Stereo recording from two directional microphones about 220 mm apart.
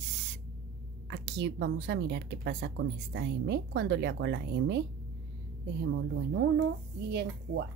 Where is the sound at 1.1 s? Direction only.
55° right (ahead or behind).